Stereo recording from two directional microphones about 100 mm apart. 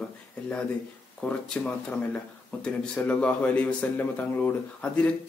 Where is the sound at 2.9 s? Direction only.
15° left (ahead or behind).